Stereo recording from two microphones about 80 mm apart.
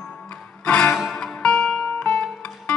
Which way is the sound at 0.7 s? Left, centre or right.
Centre.